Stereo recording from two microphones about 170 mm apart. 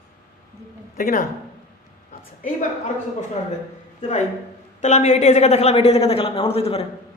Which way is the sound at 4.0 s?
40° left (ahead or behind).